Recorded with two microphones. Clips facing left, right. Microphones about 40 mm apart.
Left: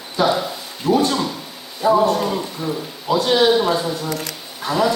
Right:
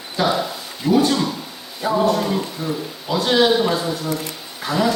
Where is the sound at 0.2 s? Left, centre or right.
Centre.